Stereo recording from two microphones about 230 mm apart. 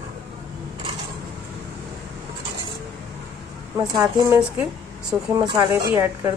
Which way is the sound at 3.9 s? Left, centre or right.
Centre.